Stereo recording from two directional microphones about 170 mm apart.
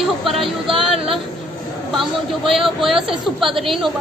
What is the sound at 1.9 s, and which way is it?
A woman's voice, centre (ahead or behind).